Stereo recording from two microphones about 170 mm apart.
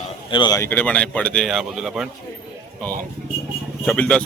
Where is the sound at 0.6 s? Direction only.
10° left (ahead or behind).